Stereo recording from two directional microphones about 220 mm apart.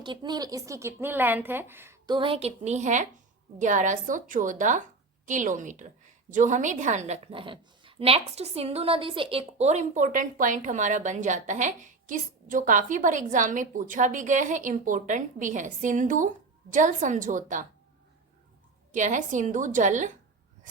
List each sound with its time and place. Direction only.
0.0 s a woman's voice: 20° right (ahead or behind); by 17.7 s 35° right (ahead or behind)
18.9 s a woman's voice: 35° right (ahead or behind)